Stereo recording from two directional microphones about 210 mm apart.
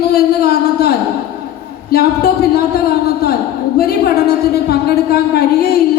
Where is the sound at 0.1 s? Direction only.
50° left (ahead or behind).